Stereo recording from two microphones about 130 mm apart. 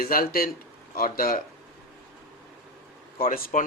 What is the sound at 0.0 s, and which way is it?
Speech, 90° left.